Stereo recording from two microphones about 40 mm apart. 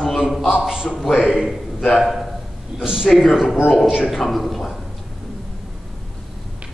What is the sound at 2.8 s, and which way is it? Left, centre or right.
Speech, centre.